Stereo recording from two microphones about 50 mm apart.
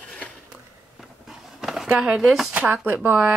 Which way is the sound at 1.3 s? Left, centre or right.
Centre.